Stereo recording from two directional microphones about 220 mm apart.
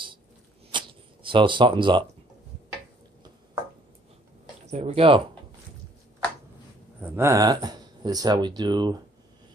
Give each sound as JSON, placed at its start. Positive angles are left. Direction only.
{"t": 0.7, "sound": "a sound", "side_deg": -20}
{"t": 4.6, "sound": "speech", "side_deg": -30}
{"t": 7.0, "sound": "speech", "side_deg": -10}